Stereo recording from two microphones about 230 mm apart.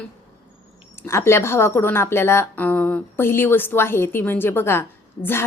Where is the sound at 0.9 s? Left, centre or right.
Centre.